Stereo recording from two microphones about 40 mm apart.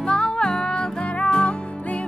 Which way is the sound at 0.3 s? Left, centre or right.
Centre.